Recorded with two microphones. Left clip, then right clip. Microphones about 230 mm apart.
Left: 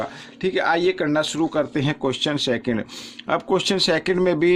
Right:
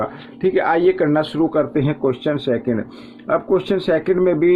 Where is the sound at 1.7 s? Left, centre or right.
Left.